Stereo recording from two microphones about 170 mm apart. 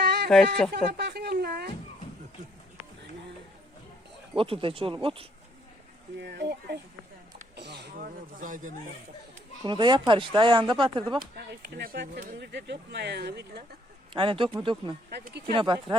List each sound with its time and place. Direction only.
0.0 s a sound: 80° right
0.3 s speech: centre (ahead or behind)
0.7 s a sound: 85° right
4.4 s speech: 30° right (ahead or behind)
6.1 s speech: 75° right (ahead or behind)
7.5 s a sound: 80° right; by 8.7 s 50° right (ahead or behind)
9.6 s speech: 25° right (ahead or behind)
11.3 s speech: 70° right (ahead or behind)
12.4 s speech: 85° right; by 13.7 s 65° right (ahead or behind)
14.1 s speech: 30° right (ahead or behind)
15.1 s speech: 75° right (ahead or behind)
15.4 s speech: 30° right (ahead or behind)